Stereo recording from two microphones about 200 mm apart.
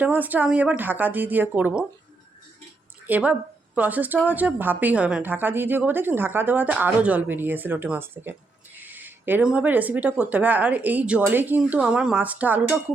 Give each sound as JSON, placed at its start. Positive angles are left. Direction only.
{"t": 0.0, "sound": "a woman's voice", "side_deg": -10}
{"t": 3.1, "sound": "a woman's voice", "side_deg": -5}